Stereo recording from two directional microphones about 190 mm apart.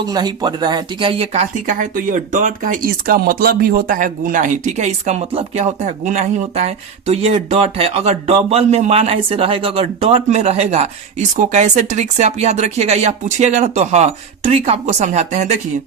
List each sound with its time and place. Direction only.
0.1 s speech: 20° right (ahead or behind); by 15.5 s 35° right (ahead or behind)